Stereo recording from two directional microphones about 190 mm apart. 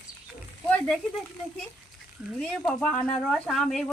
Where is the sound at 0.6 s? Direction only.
5° left (ahead or behind).